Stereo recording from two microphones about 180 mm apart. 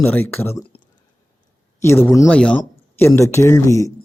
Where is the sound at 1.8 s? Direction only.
15° left (ahead or behind).